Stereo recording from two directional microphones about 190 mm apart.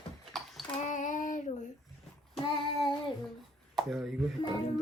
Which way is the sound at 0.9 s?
40° left (ahead or behind).